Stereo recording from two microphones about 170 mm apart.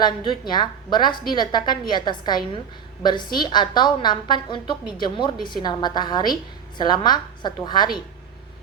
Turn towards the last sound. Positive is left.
turn(degrees=25)  # may be behind; listen again after turning